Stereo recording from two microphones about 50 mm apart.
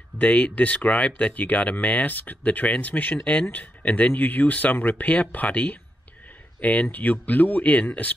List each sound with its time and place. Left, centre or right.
0.2 s speech: left